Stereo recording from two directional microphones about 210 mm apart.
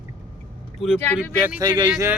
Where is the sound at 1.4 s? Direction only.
15° right (ahead or behind).